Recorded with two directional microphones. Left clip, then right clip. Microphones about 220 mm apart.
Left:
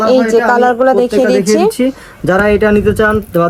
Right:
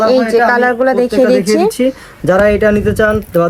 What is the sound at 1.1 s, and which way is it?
Speech, centre (ahead or behind).